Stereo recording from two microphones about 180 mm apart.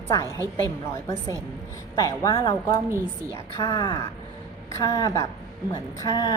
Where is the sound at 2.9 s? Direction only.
15° right (ahead or behind).